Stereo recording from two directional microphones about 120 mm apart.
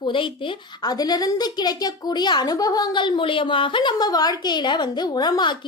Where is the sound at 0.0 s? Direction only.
45° left (ahead or behind).